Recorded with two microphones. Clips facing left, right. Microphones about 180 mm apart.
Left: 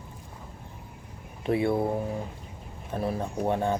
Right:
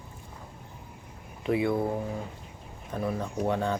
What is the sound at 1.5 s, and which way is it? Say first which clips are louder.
Speech: left 1 dB; 25° left (ahead or behind).